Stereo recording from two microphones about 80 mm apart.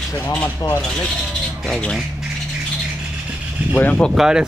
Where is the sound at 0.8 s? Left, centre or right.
Centre.